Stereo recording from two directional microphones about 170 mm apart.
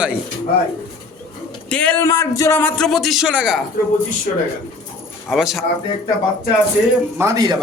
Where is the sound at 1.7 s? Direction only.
10° left (ahead or behind).